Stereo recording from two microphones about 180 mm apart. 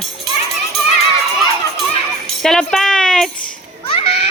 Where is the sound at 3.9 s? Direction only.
35° left (ahead or behind).